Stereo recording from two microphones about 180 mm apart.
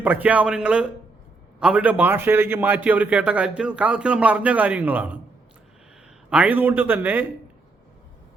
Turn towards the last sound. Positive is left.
turn(degrees=-10)  # may be behind; listen again after turning